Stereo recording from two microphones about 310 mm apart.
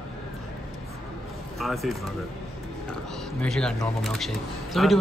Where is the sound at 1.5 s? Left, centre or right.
Centre.